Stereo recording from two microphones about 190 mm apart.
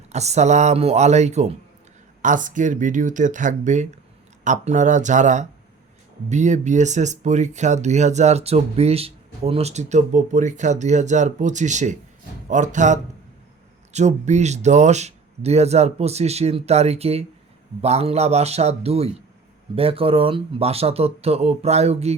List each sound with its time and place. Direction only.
0.1 s speech: 35° right (ahead or behind)